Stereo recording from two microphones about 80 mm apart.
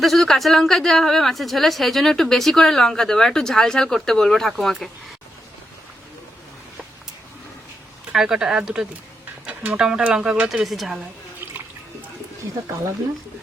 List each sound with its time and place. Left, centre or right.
0.0 s a woman's voice: centre
8.1 s speech: centre
9.5 s speech: centre